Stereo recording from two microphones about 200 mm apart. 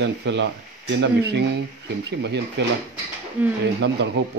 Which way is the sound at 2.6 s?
60° right (ahead or behind).